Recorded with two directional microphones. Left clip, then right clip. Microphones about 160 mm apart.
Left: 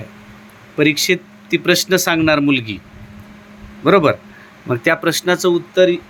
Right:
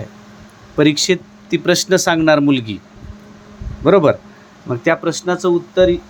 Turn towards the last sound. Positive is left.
turn(degrees=-5)  # may be behind; listen again after turning